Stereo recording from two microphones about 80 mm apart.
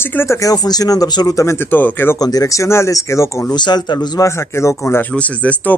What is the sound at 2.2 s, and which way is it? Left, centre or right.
Speech, left.